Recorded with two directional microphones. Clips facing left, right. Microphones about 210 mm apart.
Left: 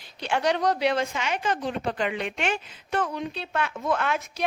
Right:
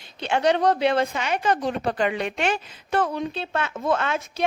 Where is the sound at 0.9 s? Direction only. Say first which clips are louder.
Right 4 dB; 60° right (ahead or behind).